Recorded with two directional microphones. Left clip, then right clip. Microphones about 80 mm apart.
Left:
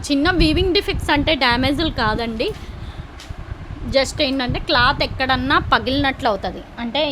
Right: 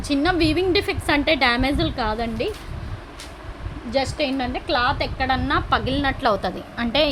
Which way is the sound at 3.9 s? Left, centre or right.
Left.